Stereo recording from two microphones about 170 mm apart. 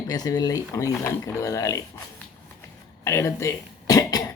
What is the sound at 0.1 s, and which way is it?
Speech, 20° left (ahead or behind).